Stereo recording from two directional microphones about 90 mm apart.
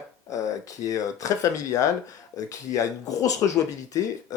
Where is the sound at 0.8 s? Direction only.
40° left (ahead or behind).